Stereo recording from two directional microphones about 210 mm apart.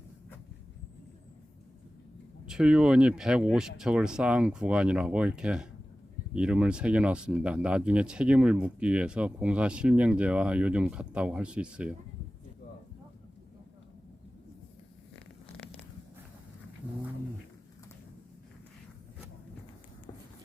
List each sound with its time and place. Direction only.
2.5 s speech: 5° right (ahead or behind)